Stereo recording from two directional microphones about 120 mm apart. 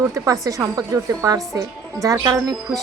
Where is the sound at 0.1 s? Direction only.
30° right (ahead or behind).